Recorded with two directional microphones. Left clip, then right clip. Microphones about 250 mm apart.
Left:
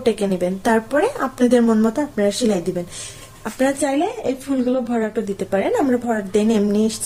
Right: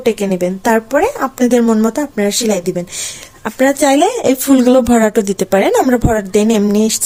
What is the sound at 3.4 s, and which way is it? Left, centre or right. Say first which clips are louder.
Speech: right 8 dB; right.